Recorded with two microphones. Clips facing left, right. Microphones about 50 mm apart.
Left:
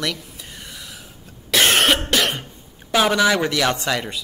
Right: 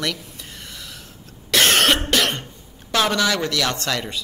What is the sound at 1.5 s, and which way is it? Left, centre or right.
Cough, centre.